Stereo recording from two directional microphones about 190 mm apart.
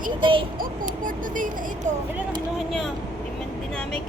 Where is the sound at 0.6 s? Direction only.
45° right (ahead or behind).